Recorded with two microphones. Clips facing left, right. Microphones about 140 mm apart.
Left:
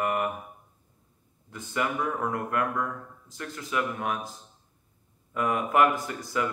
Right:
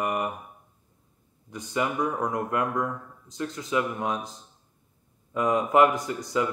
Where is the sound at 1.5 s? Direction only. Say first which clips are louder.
Right 2 dB; 20° right (ahead or behind).